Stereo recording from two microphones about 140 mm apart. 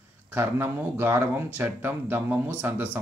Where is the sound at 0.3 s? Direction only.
15° right (ahead or behind).